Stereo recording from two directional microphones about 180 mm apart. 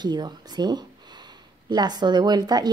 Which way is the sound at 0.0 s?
25° right (ahead or behind).